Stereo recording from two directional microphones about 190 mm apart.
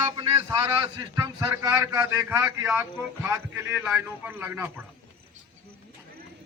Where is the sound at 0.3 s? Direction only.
15° right (ahead or behind).